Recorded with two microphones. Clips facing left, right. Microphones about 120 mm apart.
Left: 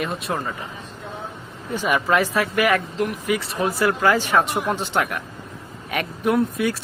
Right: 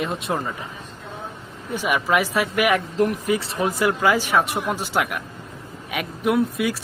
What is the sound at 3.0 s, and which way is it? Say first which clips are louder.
Speech: right 2 dB; 35° right (ahead or behind).